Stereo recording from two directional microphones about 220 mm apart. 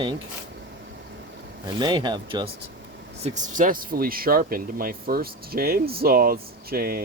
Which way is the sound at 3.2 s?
35° right (ahead or behind).